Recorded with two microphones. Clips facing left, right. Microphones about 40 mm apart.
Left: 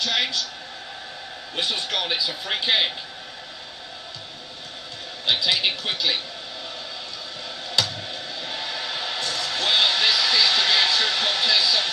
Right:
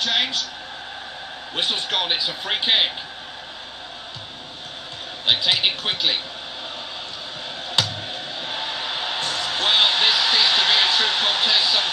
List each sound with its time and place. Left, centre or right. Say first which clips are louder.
0.0 s a sound: right 2 dB; right
1.5 s a man's voice: right 2 dB; right
5.4 s speech: right 2 dB; right
8.4 s music: right 2 dB; right